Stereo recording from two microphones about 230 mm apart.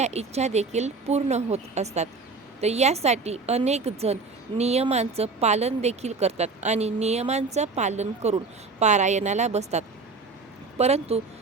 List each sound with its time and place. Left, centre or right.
0.0 s a woman's voice: right